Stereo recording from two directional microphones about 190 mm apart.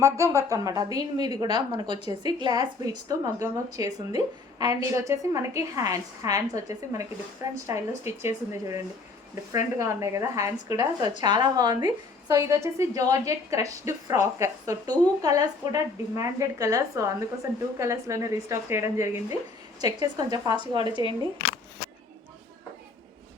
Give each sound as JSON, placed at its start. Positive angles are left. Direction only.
{"t": 0.0, "sound": "a woman's voice", "side_deg": -15}